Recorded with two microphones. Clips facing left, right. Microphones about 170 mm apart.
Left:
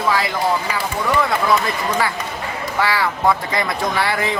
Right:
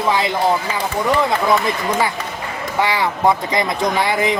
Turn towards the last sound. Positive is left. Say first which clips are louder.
# right 3 dB
turn(degrees=-20)  # may be behind; listen again after turning